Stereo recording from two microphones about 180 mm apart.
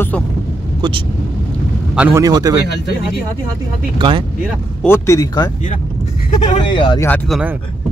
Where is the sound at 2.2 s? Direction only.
20° right (ahead or behind).